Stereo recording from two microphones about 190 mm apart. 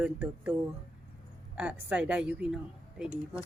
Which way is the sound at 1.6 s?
5° right (ahead or behind).